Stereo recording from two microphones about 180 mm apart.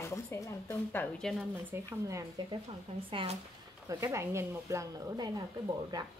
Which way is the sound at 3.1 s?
35° right (ahead or behind).